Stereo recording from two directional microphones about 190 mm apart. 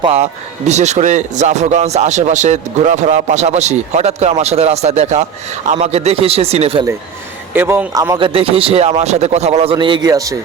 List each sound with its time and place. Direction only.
0.0 s speech: 30° right (ahead or behind)
7.5 s a man's voice: 10° right (ahead or behind)